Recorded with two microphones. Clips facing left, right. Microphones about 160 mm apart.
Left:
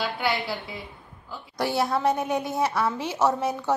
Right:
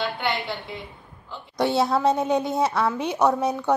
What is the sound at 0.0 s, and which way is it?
Speech, 5° left (ahead or behind).